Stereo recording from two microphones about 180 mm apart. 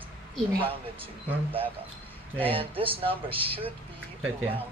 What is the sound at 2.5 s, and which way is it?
Speech, 30° right (ahead or behind).